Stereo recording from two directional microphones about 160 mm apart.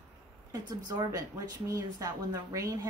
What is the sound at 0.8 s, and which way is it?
A woman's voice, 25° right (ahead or behind).